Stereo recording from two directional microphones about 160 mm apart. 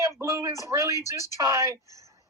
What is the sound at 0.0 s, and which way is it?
A woman's voice, 20° right (ahead or behind).